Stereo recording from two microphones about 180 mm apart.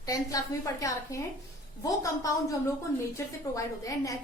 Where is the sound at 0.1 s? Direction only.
20° left (ahead or behind).